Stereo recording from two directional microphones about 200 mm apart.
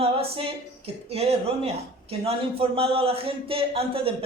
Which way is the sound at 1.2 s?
30° right (ahead or behind).